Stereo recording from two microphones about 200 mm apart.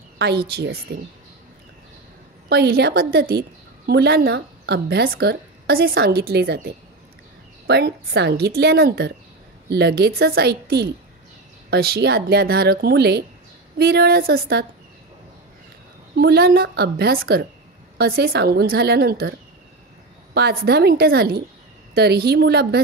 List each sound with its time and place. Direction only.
0.9 s a woman's voice: 55° right (ahead or behind)
2.5 s a woman's voice: 55° right (ahead or behind)
16.2 s a woman's voice: 50° right (ahead or behind)
20.3 s a woman's voice: 55° right (ahead or behind)